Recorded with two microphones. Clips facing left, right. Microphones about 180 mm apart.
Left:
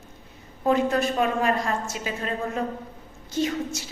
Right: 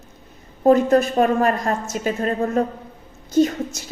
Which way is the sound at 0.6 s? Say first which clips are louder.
Right 7 dB; 45° right (ahead or behind).